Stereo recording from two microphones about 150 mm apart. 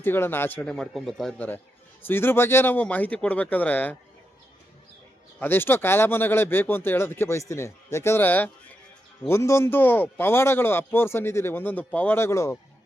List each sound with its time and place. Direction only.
0.0 s a man's voice: 15° left (ahead or behind)
5.4 s a man's voice: 15° left (ahead or behind)